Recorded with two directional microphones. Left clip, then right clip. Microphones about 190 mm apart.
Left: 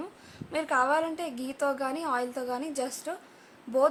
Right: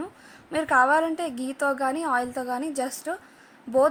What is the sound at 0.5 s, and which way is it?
A woman's voice, 30° right (ahead or behind).